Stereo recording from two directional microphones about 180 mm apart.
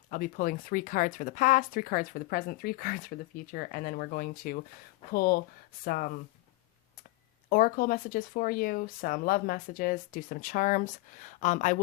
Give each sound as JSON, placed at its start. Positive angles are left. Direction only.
{"t": 0.1, "sound": "speech", "side_deg": 50}
{"t": 7.5, "sound": "speech", "side_deg": 50}